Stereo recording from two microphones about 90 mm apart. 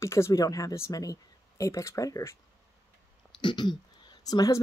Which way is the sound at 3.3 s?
60° left (ahead or behind).